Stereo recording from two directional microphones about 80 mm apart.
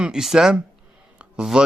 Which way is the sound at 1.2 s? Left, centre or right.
Centre.